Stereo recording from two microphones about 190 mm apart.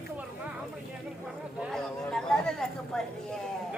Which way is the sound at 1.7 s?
5° left (ahead or behind).